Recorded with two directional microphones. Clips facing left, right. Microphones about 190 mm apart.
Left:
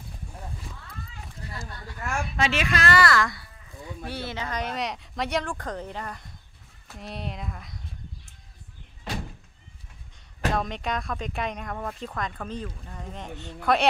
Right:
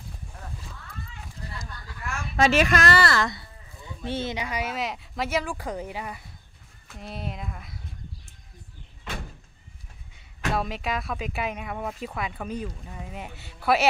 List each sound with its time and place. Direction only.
1.4 s a sound: 40° right (ahead or behind)
2.3 s speech: 45° right (ahead or behind)
3.0 s speech: 25° right (ahead or behind); by 7.8 s centre (ahead or behind)
10.5 s speech: 5° right (ahead or behind)